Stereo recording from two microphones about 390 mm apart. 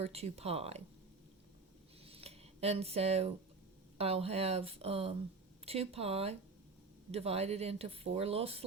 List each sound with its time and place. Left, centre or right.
0.0 s speech: centre
2.0 s a sound: centre
3.9 s speech: centre